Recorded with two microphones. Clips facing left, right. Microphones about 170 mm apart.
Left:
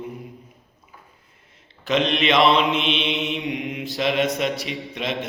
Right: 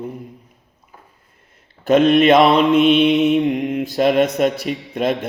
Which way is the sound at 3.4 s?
45° right (ahead or behind).